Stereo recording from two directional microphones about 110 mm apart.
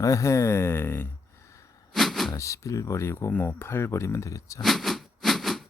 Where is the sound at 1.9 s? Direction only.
Centre (ahead or behind).